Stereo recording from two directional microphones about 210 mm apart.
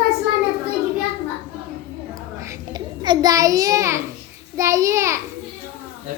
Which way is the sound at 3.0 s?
20° right (ahead or behind).